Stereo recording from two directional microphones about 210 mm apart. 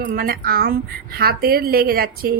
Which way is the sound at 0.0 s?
45° right (ahead or behind).